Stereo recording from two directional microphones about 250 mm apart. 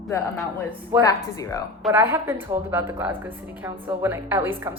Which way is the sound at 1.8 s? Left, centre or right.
Centre.